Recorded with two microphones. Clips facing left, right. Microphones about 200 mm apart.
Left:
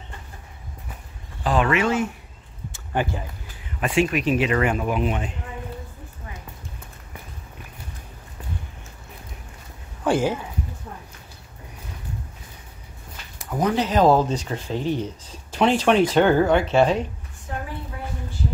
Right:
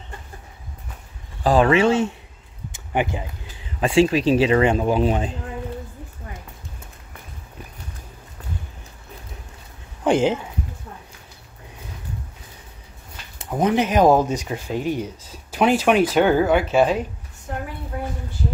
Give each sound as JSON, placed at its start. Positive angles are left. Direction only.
{"t": 1.4, "sound": "speech", "side_deg": -35}
{"t": 2.7, "sound": "a sound", "side_deg": -15}
{"t": 3.8, "sound": "speech", "side_deg": -30}
{"t": 10.0, "sound": "speech", "side_deg": -20}
{"t": 13.4, "sound": "speech", "side_deg": -20}